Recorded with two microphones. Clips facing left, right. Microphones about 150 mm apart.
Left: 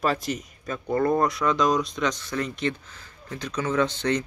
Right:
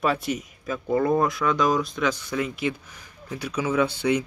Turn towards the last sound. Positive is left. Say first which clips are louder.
# right 1 dB
turn(degrees=-10)  # may be behind; listen again after turning